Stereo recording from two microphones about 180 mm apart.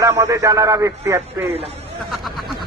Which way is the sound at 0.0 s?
15° right (ahead or behind).